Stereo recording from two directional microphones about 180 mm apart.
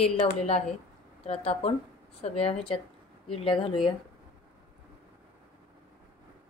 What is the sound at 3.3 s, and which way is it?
Speech, 30° left (ahead or behind).